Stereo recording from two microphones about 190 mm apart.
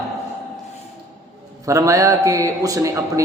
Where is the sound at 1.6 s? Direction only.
15° right (ahead or behind).